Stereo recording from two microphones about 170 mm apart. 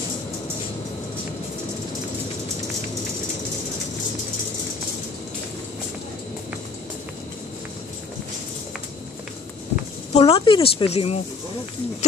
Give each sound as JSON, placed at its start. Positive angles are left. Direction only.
{"t": 10.1, "sound": "speech", "side_deg": 35}